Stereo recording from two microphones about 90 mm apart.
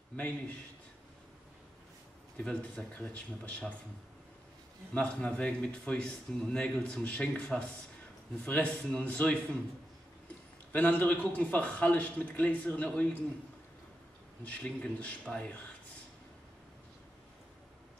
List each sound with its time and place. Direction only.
0.1 s a man's voice: 15° left (ahead or behind)
2.3 s a man's voice: 15° left (ahead or behind)
4.9 s a man's voice: 15° left (ahead or behind)
10.7 s a man's voice: 20° left (ahead or behind)
14.4 s a man's voice: 15° left (ahead or behind)